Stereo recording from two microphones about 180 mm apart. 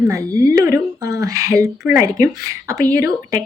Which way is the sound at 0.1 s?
20° right (ahead or behind).